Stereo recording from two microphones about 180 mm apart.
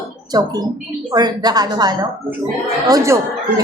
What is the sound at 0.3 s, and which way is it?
Speech, 20° right (ahead or behind).